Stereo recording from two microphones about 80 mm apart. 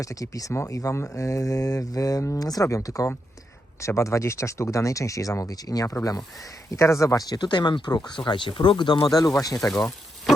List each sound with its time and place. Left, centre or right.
0.0 s speech: left
7.3 s speech: left